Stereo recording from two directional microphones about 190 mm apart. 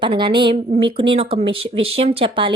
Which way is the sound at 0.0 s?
25° right (ahead or behind).